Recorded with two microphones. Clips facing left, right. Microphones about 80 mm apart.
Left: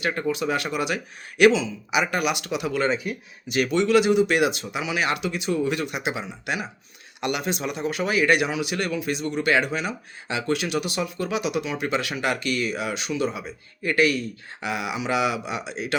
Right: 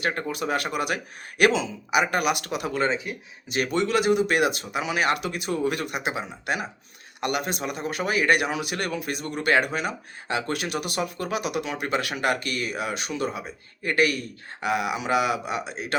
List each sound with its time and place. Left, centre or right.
0.0 s speech: right
2.9 s speech: right
3.5 s speech: right